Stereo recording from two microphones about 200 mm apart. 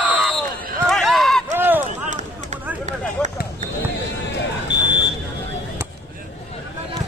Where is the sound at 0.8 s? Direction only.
Centre (ahead or behind).